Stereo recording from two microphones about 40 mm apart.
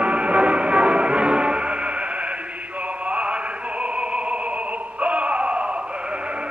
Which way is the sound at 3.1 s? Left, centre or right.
Right.